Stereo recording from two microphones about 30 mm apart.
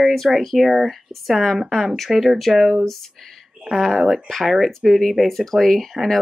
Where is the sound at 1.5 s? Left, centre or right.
Centre.